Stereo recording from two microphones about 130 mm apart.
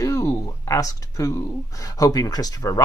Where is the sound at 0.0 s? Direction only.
25° left (ahead or behind).